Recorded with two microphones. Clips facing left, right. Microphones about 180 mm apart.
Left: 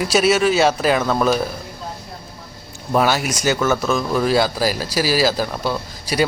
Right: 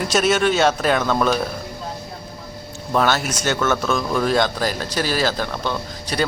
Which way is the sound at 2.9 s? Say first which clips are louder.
Left 2 dB; 10° left (ahead or behind).